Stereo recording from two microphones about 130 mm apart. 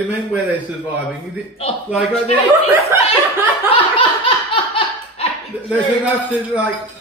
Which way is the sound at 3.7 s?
40° left (ahead or behind).